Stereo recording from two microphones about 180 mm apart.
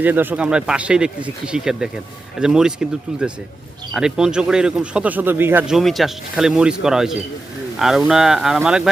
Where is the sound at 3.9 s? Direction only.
5° right (ahead or behind).